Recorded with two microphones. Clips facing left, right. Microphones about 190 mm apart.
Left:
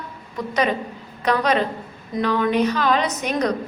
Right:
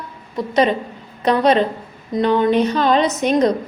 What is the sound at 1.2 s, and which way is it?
A woman's voice, 30° right (ahead or behind).